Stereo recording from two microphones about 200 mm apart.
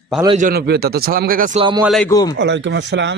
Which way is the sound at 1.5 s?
25° right (ahead or behind).